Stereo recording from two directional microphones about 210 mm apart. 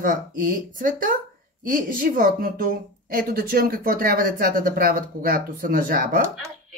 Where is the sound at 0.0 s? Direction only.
40° right (ahead or behind).